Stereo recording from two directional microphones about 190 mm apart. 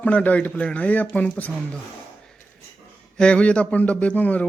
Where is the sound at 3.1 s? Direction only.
5° left (ahead or behind).